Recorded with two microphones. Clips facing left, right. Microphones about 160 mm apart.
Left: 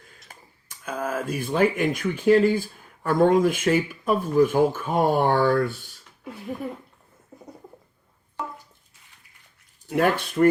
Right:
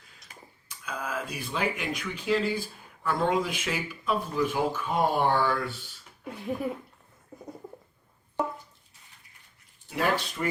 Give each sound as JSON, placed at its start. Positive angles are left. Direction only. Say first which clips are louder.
{"t": 0.3, "sound": "speech", "louder": "right 3 dB", "side_deg": 50}
{"t": 6.2, "sound": "a sound", "louder": "even", "side_deg": 0}
{"t": 9.9, "sound": "speech", "louder": "left 6 dB", "side_deg": 55}